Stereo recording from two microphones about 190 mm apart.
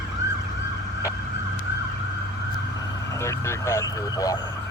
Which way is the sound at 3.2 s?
15° left (ahead or behind).